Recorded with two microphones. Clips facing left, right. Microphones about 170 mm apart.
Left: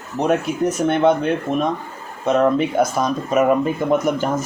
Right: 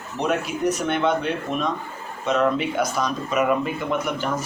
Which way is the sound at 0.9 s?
45° left (ahead or behind).